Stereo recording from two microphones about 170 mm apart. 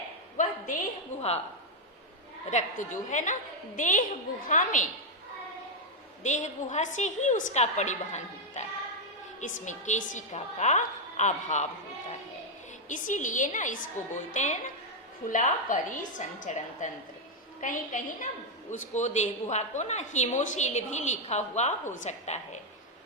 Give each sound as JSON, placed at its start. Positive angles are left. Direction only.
{"t": 0.4, "sound": "a sound", "side_deg": 50}
{"t": 2.5, "sound": "a woman's voice", "side_deg": 45}
{"t": 6.2, "sound": "a woman's voice", "side_deg": 45}
{"t": 12.9, "sound": "a woman's voice", "side_deg": 50}